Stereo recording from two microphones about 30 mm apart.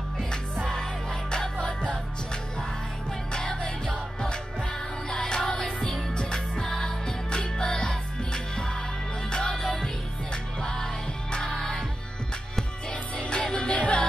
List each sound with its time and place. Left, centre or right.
1.6 s music: left
3.3 s music: left
6.1 s music: left
9.6 s music: centre
10.6 s music: left
11.5 s music: centre
13.2 s music: left
13.7 s music: left